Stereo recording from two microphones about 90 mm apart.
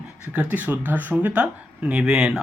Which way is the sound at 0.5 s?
20° right (ahead or behind).